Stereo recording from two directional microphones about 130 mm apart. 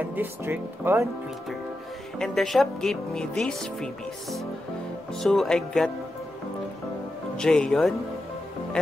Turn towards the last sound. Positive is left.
turn(degrees=5)  # may be behind; listen again after turning